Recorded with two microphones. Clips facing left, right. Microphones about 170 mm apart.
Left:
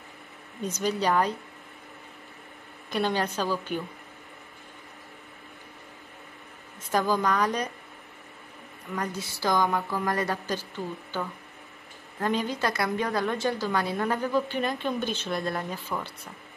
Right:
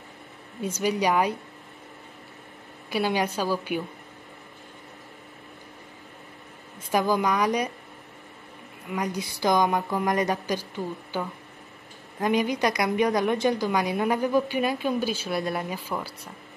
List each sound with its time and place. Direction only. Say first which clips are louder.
0.6 s a woman's voice: right 2 dB; 10° right (ahead or behind)
2.9 s a woman's voice: right 2 dB; 10° right (ahead or behind)
6.9 s a woman's voice: right 2 dB; 10° right (ahead or behind)
8.9 s a woman's voice: right 3 dB; 15° right (ahead or behind)